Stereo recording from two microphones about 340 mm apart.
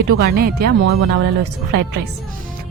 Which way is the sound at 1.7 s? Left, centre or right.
Right.